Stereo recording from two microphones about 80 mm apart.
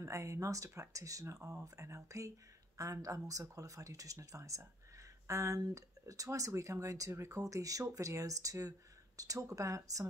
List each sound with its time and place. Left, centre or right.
0.0 s speech: right